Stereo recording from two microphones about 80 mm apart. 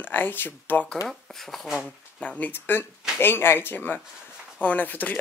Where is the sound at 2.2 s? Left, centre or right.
Centre.